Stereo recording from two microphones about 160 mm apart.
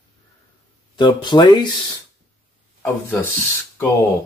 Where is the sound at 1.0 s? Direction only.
30° left (ahead or behind).